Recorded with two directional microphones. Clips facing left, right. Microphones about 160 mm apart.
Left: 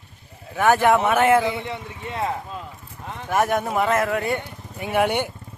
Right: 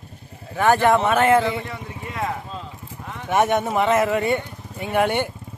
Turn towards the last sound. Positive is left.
turn(degrees=10)  # may be behind; listen again after turning